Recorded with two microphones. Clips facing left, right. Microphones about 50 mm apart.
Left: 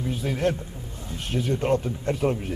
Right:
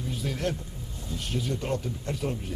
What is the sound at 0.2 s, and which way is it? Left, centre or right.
Speech, left.